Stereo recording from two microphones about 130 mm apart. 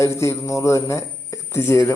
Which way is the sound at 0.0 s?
20° left (ahead or behind).